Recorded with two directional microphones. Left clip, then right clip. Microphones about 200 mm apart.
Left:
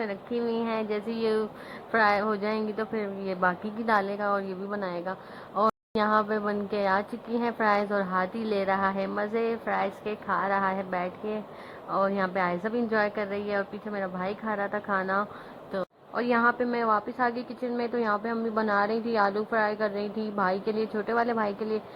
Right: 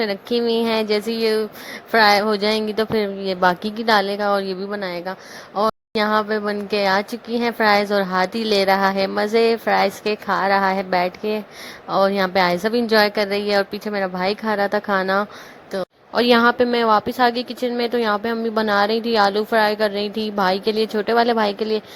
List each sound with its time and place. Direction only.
0.0 s a woman's voice: 45° right (ahead or behind)
15.7 s a sound: 35° right (ahead or behind)
16.3 s a woman's voice: 50° right (ahead or behind)